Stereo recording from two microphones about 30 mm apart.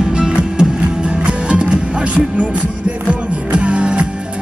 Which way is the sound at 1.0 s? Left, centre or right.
Right.